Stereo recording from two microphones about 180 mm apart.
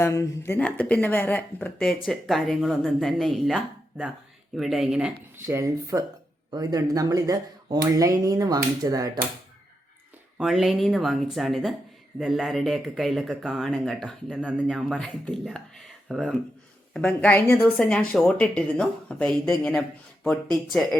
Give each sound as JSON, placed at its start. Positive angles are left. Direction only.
{"t": 0.0, "sound": "speech", "side_deg": 15}
{"t": 5.5, "sound": "speech", "side_deg": -15}
{"t": 10.3, "sound": "speech", "side_deg": 0}
{"t": 16.9, "sound": "speech", "side_deg": 5}